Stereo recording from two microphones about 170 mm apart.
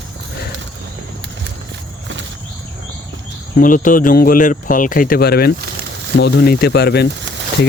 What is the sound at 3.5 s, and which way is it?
Speech, 50° left (ahead or behind).